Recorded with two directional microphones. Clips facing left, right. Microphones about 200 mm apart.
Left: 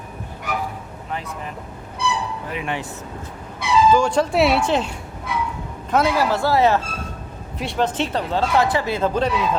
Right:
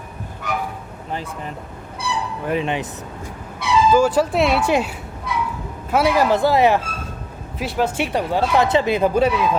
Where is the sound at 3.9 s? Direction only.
5° right (ahead or behind).